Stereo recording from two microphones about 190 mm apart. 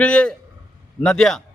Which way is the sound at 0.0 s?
5° left (ahead or behind).